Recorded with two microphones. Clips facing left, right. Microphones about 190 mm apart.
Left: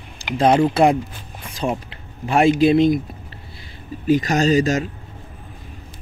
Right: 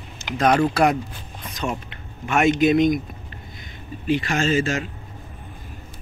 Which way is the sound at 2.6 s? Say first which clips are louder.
Left 1 dB; 30° left (ahead or behind).